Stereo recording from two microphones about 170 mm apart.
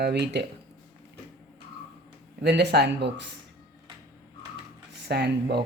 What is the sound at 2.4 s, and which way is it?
Speech, 80° right.